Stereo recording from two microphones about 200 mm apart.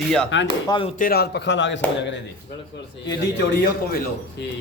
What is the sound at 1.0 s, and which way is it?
Speech, 50° left (ahead or behind).